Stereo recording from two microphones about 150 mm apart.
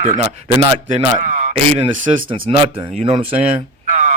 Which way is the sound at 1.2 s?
55° right (ahead or behind).